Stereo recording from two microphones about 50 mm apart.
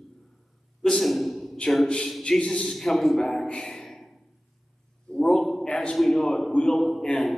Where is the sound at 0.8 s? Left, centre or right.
Centre.